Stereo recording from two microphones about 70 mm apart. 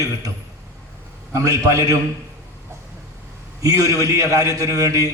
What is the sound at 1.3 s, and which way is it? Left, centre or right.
Speech, right.